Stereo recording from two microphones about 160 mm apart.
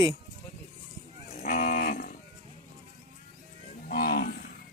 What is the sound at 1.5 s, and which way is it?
Cattle, 60° left (ahead or behind).